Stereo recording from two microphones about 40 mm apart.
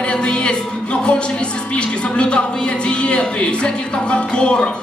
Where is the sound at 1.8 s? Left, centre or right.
Left.